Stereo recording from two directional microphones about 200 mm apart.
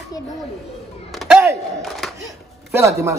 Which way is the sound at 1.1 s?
Centre (ahead or behind).